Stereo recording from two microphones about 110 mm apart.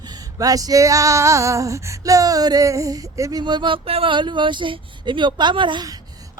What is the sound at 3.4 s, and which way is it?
Speech, 45° right (ahead or behind).